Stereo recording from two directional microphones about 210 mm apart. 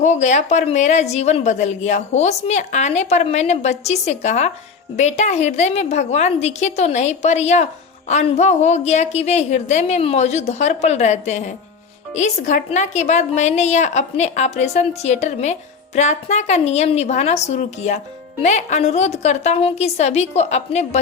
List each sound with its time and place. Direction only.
0.0 s a woman's voice: 35° left (ahead or behind)